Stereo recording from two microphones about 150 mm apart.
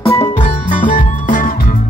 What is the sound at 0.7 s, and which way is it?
Music, 60° left (ahead or behind).